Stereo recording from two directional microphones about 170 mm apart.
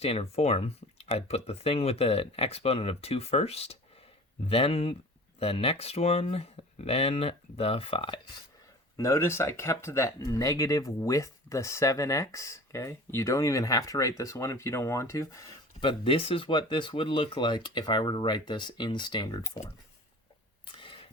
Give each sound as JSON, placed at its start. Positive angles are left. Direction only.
{"t": 0.0, "sound": "speech", "side_deg": 35}
{"t": 9.0, "sound": "speech", "side_deg": 15}
{"t": 15.8, "sound": "speech", "side_deg": 30}
{"t": 20.7, "sound": "a sound", "side_deg": 30}